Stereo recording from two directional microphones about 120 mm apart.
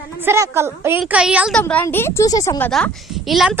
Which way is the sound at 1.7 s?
15° left (ahead or behind).